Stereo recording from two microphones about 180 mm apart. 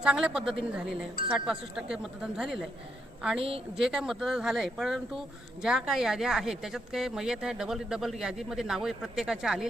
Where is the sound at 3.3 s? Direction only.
30° right (ahead or behind).